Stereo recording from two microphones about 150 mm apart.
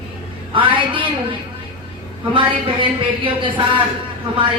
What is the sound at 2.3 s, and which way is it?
Speech, 35° right (ahead or behind).